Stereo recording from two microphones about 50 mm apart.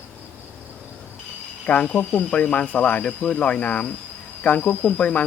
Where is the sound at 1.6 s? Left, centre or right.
Left.